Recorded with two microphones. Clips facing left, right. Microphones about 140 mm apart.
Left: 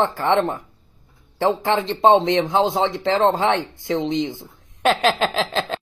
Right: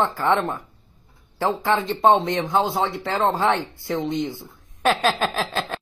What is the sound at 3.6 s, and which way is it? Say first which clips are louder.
Speech: left 3 dB; 20° left (ahead or behind).